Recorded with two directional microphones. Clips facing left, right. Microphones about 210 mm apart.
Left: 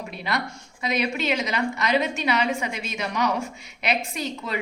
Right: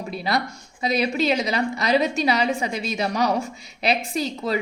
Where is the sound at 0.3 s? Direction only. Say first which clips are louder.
Right 3 dB; 35° right (ahead or behind).